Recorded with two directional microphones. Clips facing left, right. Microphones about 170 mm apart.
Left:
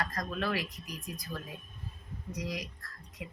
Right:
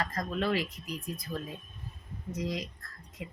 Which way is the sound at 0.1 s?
25° right (ahead or behind).